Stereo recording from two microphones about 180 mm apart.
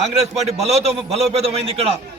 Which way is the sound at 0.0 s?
35° right (ahead or behind).